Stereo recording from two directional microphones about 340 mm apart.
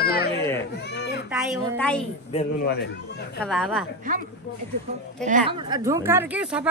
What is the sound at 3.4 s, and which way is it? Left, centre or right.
Speech, centre.